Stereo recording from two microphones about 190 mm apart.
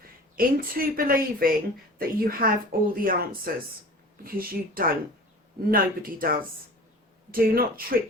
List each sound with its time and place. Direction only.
0.3 s speech: 50° right (ahead or behind)